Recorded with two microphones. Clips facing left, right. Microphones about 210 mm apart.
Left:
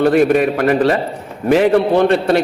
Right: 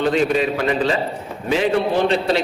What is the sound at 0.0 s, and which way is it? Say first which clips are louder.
A man's voice: left 6 dB; 60° left (ahead or behind).